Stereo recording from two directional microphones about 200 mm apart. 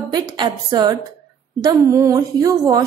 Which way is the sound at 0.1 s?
20° right (ahead or behind).